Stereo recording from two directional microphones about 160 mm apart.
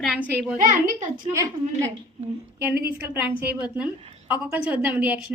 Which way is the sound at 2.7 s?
75° right (ahead or behind).